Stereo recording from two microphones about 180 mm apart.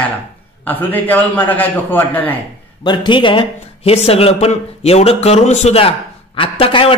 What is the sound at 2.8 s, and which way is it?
A man's voice, 25° left (ahead or behind).